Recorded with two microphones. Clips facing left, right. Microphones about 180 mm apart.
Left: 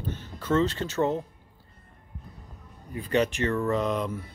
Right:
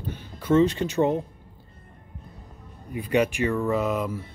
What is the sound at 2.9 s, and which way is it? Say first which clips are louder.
Speech: right 2 dB; 15° right (ahead or behind).